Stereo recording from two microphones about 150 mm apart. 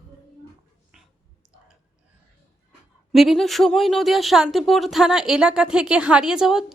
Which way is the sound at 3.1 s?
Centre (ahead or behind).